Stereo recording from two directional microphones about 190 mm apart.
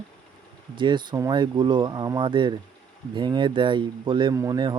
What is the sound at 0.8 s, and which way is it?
Speech, 25° right (ahead or behind).